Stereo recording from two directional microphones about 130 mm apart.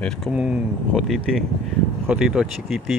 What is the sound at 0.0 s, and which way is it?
Speech, 5° left (ahead or behind).